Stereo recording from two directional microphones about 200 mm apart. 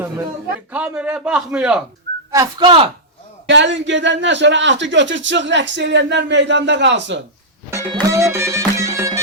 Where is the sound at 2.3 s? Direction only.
20° right (ahead or behind).